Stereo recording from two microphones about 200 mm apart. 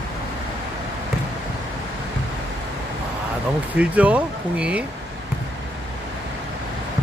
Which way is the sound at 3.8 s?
5° right (ahead or behind).